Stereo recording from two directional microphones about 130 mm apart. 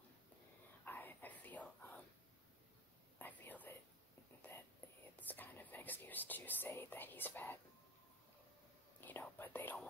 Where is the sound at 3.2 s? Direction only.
15° left (ahead or behind).